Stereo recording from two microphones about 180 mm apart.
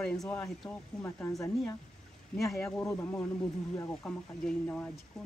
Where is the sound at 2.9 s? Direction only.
10° left (ahead or behind).